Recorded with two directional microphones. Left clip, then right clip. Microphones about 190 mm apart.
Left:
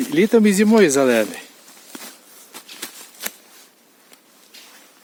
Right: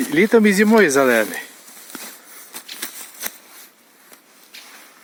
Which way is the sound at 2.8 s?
45° right (ahead or behind).